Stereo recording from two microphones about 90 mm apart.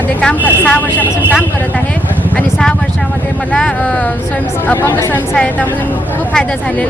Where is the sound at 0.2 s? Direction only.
15° left (ahead or behind).